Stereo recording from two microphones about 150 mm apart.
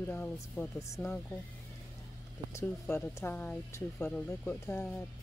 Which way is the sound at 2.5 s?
15° left (ahead or behind).